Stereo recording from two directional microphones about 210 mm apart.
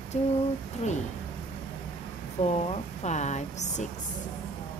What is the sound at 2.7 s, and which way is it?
Speech, 35° left (ahead or behind).